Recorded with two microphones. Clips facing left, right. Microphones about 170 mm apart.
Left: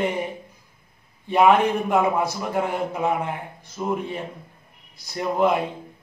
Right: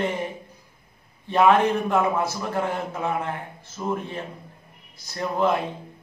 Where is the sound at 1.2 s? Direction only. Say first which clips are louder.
Left 1 dB; 15° left (ahead or behind).